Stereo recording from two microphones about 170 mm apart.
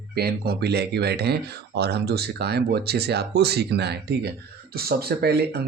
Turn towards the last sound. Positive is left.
turn(degrees=-70)  # may be behind; listen again after turning